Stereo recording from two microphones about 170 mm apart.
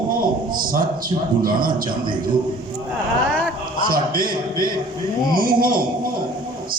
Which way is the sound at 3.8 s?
55° right (ahead or behind).